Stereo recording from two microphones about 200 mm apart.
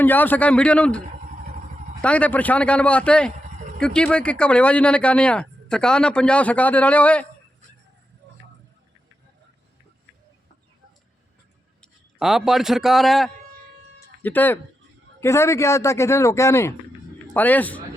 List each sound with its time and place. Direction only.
0.0 s speech: 10° left (ahead or behind)
11.8 s speech: centre (ahead or behind)